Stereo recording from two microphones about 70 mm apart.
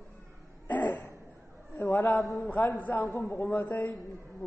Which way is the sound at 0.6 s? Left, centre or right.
Left.